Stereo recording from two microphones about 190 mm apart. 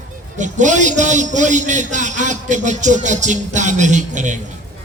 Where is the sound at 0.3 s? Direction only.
40° right (ahead or behind).